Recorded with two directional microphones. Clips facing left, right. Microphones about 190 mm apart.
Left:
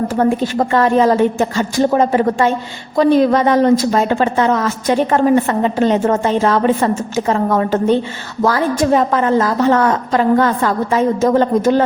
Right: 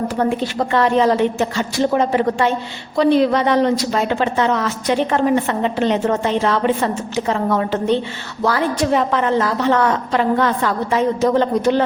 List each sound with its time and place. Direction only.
0.2 s a woman's voice: 45° left (ahead or behind)